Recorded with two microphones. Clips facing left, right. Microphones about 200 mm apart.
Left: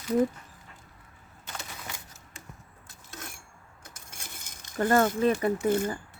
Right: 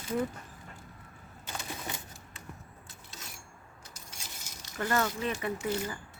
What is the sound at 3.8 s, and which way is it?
Keys jangling, 55° left (ahead or behind).